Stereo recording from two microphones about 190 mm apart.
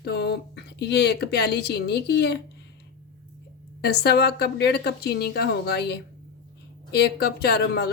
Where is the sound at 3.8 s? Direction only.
60° left (ahead or behind).